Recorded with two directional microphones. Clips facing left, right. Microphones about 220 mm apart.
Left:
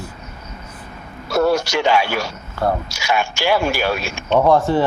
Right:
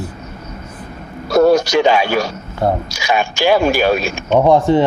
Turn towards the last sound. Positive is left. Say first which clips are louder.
# right 3 dB
turn(degrees=-15)  # may be behind; listen again after turning